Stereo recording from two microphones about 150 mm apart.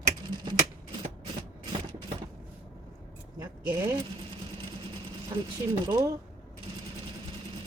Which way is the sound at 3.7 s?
20° right (ahead or behind).